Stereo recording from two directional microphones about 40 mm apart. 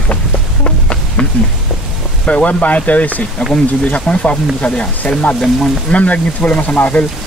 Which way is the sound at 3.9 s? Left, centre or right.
Left.